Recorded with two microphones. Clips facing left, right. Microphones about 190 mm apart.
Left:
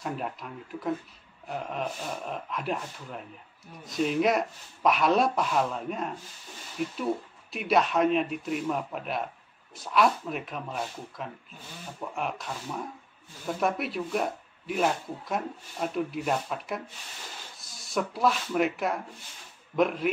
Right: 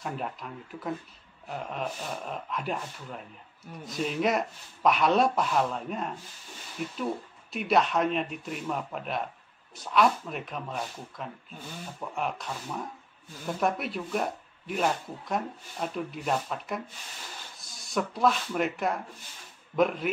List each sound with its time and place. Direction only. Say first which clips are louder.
0.0 s speech: left 1 dB; centre (ahead or behind)
13.6 s speech: left 1 dB; centre (ahead or behind)